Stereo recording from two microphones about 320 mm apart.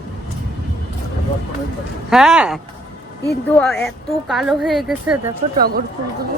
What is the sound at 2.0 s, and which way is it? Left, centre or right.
A woman's voice, centre.